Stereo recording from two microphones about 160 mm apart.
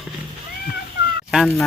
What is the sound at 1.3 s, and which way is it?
Fowl, centre (ahead or behind).